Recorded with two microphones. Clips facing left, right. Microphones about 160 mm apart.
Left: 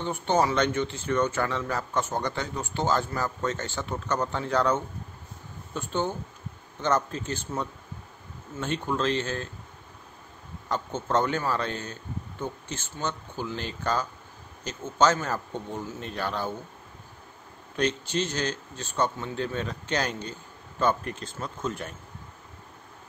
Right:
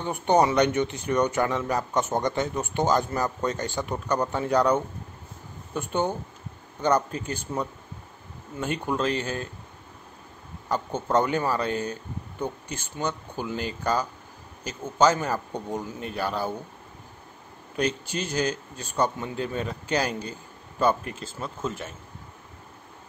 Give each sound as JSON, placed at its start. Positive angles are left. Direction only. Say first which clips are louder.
{"t": 0.0, "sound": "speech", "louder": "right 3 dB", "side_deg": -15}
{"t": 10.7, "sound": "speech", "louder": "right 2 dB", "side_deg": -10}
{"t": 17.7, "sound": "speech", "louder": "left 1 dB", "side_deg": -10}